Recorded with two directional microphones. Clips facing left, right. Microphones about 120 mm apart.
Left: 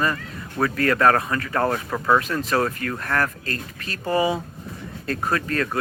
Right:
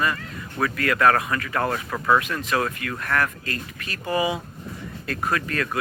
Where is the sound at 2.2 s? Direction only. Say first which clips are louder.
Left 2 dB; 35° left (ahead or behind).